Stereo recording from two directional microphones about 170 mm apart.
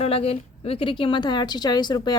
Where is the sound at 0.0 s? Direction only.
35° left (ahead or behind).